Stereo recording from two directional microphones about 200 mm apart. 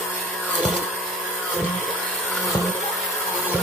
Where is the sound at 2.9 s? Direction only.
Centre (ahead or behind).